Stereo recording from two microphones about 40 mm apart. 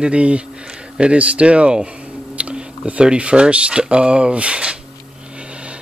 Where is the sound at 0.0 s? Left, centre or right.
Right.